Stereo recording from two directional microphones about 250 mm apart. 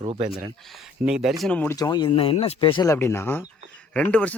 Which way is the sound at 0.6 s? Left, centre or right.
Centre.